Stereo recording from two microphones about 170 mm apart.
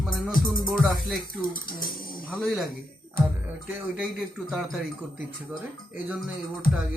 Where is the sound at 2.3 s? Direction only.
5° left (ahead or behind).